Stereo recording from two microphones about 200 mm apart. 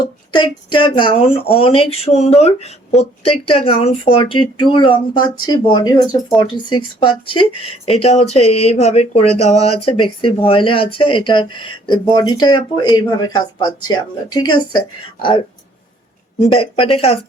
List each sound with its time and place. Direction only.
0.0 s speech: 20° left (ahead or behind)
16.4 s speech: 25° left (ahead or behind)